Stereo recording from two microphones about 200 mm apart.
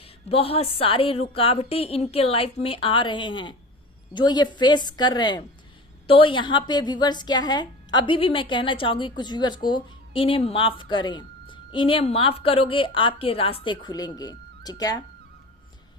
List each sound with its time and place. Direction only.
0.0 s a woman's voice: 30° left (ahead or behind)